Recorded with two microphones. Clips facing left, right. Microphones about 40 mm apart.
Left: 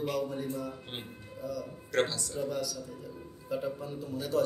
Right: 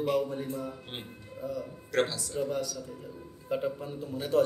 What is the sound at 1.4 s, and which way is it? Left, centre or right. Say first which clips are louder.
Speech: right 2 dB; right.